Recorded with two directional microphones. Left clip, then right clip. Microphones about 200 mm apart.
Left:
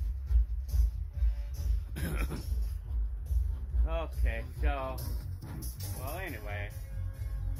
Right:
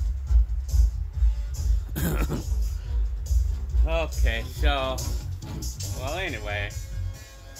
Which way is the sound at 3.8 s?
15° right (ahead or behind).